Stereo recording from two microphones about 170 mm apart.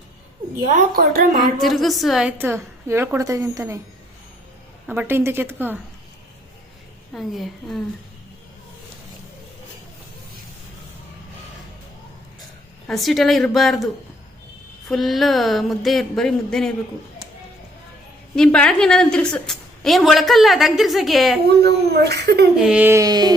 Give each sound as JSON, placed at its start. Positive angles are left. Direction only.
{"t": 0.9, "sound": "speech", "side_deg": -60}
{"t": 1.4, "sound": "a woman's voice", "side_deg": 0}
{"t": 2.4, "sound": "a woman's voice", "side_deg": -15}
{"t": 4.9, "sound": "a woman's voice", "side_deg": -10}
{"t": 7.1, "sound": "a woman's voice", "side_deg": 0}
{"t": 12.9, "sound": "a woman's voice", "side_deg": 0}
{"t": 14.8, "sound": "a woman's voice", "side_deg": 0}
{"t": 18.3, "sound": "a woman's voice", "side_deg": 5}
{"t": 21.5, "sound": "speech", "side_deg": -70}
{"t": 22.5, "sound": "a woman's voice", "side_deg": -5}